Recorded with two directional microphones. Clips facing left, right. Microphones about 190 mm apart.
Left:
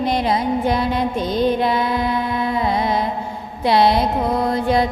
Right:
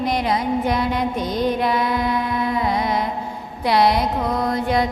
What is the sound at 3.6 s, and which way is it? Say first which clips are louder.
Music: left 2 dB; 25° left (ahead or behind).